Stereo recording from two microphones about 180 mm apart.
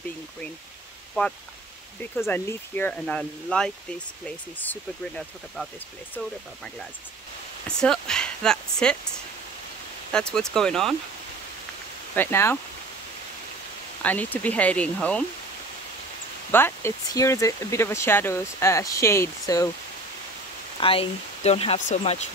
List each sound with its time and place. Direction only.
1.2 s speech: 10° left (ahead or behind)
7.6 s speech: 5° left (ahead or behind)
10.1 s speech: 5° left (ahead or behind)
12.2 s speech: 15° left (ahead or behind)
14.0 s speech: 10° left (ahead or behind)
16.5 s speech: 15° left (ahead or behind)
20.8 s speech: 30° left (ahead or behind)